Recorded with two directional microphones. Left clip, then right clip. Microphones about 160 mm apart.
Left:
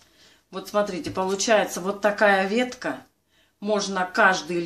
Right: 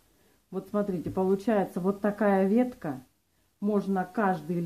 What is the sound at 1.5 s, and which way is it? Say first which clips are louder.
Speech: left 7 dB; 35° right (ahead or behind).